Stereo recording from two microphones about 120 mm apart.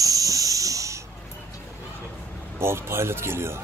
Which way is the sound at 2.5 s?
20° right (ahead or behind).